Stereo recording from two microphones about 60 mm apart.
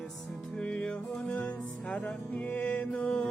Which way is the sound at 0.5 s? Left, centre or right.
Centre.